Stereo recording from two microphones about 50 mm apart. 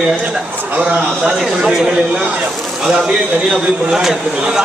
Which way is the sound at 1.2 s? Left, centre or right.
Centre.